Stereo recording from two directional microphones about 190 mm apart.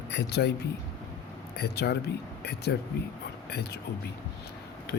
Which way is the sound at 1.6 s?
60° left (ahead or behind).